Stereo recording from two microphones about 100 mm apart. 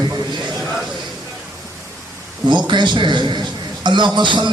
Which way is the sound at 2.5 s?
50° right (ahead or behind).